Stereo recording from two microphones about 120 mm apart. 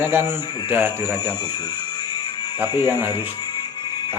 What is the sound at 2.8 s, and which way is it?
Speech, 20° right (ahead or behind).